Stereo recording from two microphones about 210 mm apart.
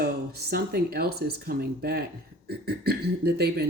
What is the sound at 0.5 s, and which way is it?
Speech, 45° right (ahead or behind).